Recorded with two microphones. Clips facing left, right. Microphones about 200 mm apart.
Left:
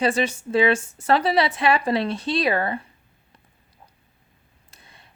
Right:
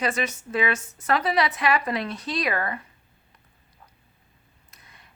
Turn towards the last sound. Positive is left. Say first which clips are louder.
# left 2 dB
turn(degrees=30)  # may be behind; listen again after turning